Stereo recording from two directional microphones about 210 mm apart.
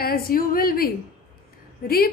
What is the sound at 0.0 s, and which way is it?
Speech, 45° left (ahead or behind).